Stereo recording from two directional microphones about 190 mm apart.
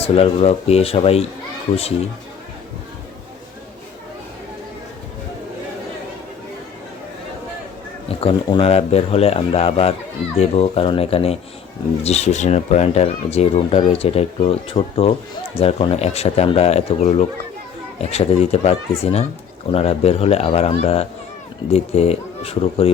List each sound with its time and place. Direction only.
0.0 s speech: 30° left (ahead or behind)
8.0 s speech: 30° left (ahead or behind)